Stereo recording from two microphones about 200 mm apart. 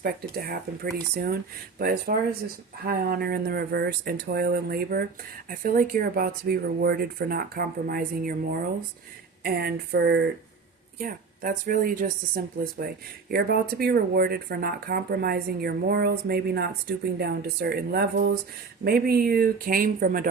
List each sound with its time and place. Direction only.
0.0 s speech: 50° right (ahead or behind)
10.9 s speech: 45° right (ahead or behind)